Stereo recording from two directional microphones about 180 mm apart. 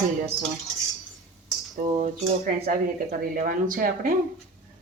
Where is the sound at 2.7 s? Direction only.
50° right (ahead or behind).